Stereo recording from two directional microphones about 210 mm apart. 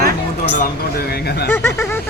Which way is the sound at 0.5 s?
45° left (ahead or behind).